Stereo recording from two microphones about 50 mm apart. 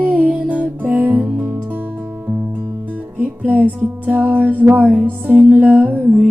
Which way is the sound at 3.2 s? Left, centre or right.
Right.